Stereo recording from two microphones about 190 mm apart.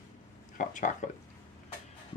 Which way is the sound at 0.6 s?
40° left (ahead or behind).